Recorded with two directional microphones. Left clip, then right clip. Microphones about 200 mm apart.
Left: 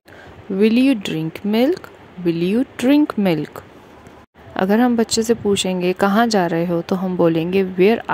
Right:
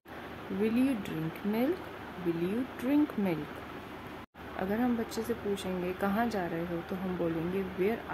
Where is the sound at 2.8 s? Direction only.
50° left (ahead or behind).